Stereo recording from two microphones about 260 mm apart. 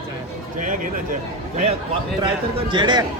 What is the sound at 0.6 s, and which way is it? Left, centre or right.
A man's voice, right.